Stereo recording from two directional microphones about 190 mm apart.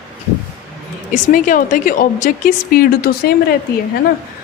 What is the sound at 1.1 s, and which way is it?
A woman's voice, 45° left (ahead or behind).